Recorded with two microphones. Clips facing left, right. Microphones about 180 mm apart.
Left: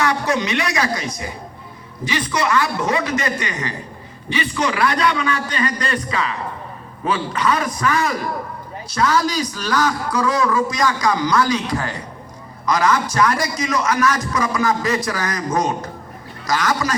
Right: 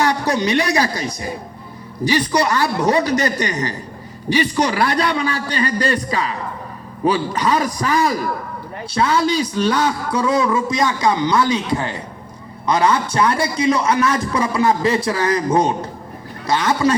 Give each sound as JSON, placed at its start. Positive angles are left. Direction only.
{"t": 0.0, "sound": "a woman's voice", "side_deg": -35}